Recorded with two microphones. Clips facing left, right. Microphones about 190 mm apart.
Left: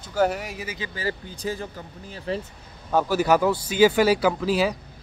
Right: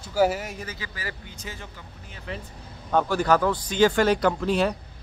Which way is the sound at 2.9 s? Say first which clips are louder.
Left 1 dB; 5° left (ahead or behind).